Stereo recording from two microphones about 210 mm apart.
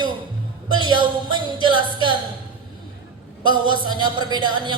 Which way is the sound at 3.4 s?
20° right (ahead or behind).